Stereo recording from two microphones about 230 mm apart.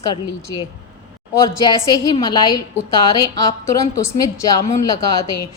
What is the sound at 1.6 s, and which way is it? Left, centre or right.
A woman's voice, centre.